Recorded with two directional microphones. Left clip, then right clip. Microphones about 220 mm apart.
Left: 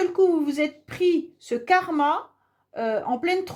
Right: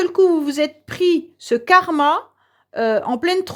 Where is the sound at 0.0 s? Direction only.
45° right (ahead or behind).